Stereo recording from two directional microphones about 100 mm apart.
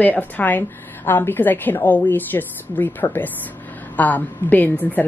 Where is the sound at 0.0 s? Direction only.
15° left (ahead or behind).